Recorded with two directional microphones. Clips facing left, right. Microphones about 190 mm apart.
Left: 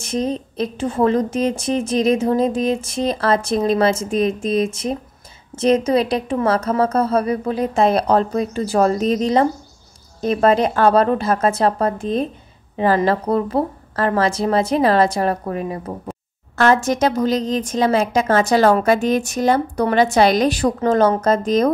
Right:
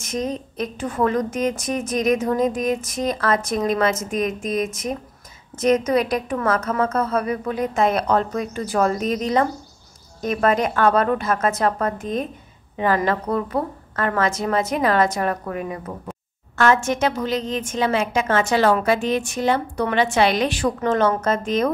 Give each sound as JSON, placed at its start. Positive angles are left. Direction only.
{"t": 0.0, "sound": "a woman's voice", "side_deg": 30}